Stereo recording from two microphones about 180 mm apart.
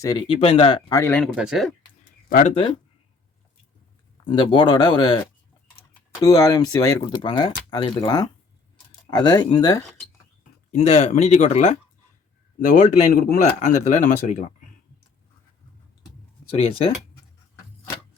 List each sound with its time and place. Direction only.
0.0 s speech: 20° left (ahead or behind)
0.3 s speech: 30° left (ahead or behind)
0.9 s speech: 15° left (ahead or behind)
1.2 s speech: centre (ahead or behind)
4.2 s speech: 25° left (ahead or behind)
6.2 s speech: 20° left (ahead or behind)
10.7 s speech: 40° left (ahead or behind)
16.5 s speech: 30° left (ahead or behind)